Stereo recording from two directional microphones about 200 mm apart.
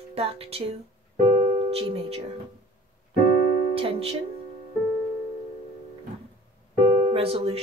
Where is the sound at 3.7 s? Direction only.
30° right (ahead or behind).